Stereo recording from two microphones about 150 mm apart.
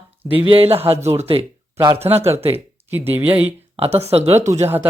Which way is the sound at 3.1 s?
10° right (ahead or behind).